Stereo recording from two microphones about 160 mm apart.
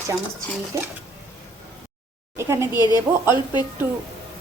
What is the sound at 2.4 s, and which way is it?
Speech, 15° right (ahead or behind).